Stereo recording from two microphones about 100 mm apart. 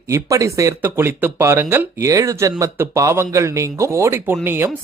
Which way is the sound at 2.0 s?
35° right (ahead or behind).